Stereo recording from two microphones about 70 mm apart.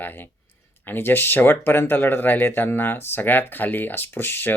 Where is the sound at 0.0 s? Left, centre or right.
Left.